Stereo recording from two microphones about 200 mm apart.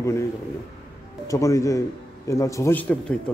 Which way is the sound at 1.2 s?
15° left (ahead or behind).